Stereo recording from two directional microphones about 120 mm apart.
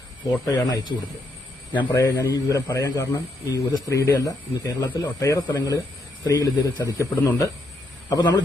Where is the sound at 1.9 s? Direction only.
25° left (ahead or behind).